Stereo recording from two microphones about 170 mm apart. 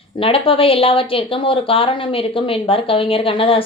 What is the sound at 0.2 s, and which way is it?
Speech, 35° left (ahead or behind).